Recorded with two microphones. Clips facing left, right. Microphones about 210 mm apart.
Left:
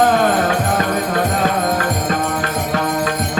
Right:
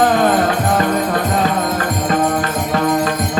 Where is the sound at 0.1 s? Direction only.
45° left (ahead or behind).